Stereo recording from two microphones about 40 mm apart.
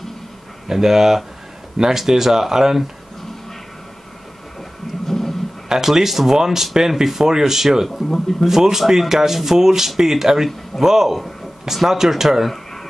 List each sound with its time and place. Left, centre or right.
0.7 s speech: centre
5.0 s horse: centre
5.7 s speech: centre
7.9 s speech: centre
8.5 s speech: centre